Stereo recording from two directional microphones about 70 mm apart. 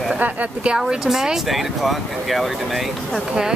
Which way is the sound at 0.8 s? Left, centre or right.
Centre.